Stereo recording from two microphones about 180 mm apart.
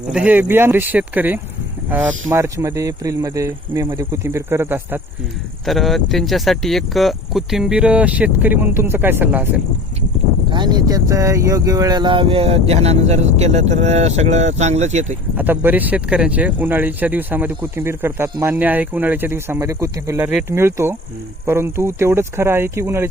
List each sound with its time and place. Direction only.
0.1 s speech: 5° right (ahead or behind)
5.6 s speech: centre (ahead or behind)
10.5 s speech: 25° right (ahead or behind); by 15.2 s 40° right (ahead or behind)
15.4 s speech: 10° right (ahead or behind)